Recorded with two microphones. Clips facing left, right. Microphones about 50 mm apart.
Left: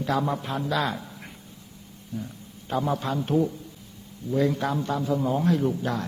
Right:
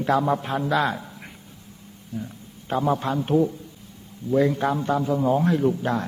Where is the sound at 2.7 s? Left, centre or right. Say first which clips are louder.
Right 2 dB; right.